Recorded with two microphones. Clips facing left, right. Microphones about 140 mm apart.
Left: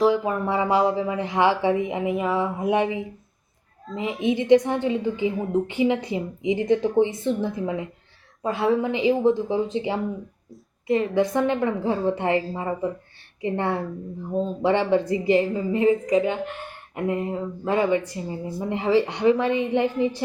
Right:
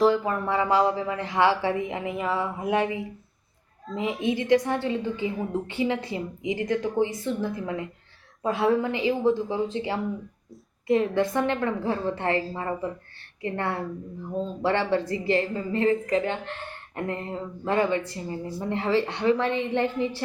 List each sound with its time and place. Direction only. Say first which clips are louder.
0.3 s speech: left 2 dB; 15° left (ahead or behind)
3.8 s a woman's voice: even; centre (ahead or behind)
4.2 s a woman's voice: left 5 dB; 20° left (ahead or behind)
8.4 s a woman's voice: left 1 dB; centre (ahead or behind)
8.8 s speech: left 4 dB; 20° left (ahead or behind)
10.5 s a woman's voice: even; centre (ahead or behind)
11.2 s a woman's voice: left 3 dB; 15° left (ahead or behind)